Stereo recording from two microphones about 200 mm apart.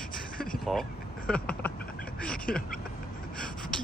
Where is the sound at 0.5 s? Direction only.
Centre (ahead or behind).